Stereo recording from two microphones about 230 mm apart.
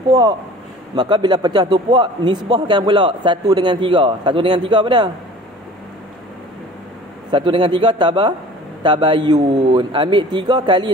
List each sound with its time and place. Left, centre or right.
0.1 s a man's voice: centre
7.2 s a man's voice: right